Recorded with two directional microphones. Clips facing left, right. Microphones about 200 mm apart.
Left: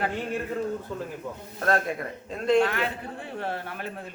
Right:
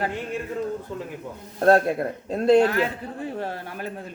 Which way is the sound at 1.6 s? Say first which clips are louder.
Right 8 dB; 35° right (ahead or behind).